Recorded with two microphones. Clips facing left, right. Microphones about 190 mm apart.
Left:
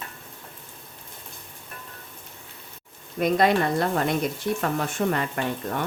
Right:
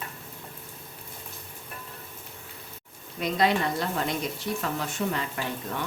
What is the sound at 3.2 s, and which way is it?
Speech, 50° left (ahead or behind).